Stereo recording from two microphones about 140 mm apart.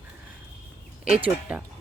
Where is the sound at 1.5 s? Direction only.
10° right (ahead or behind).